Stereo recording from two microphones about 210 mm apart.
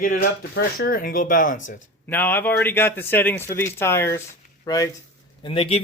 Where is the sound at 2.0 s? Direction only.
10° left (ahead or behind).